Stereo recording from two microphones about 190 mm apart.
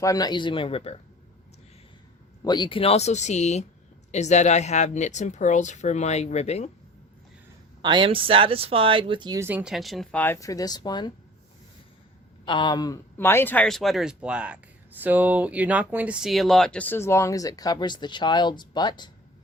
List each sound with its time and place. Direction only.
0.0 s speech: 20° left (ahead or behind)
2.4 s speech: 25° left (ahead or behind)
7.8 s speech: 25° right (ahead or behind); by 11.1 s 20° left (ahead or behind)
12.5 s a man's voice: 25° left (ahead or behind)